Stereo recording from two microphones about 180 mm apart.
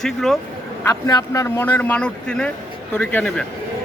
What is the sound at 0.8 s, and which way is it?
A man's voice, 15° left (ahead or behind).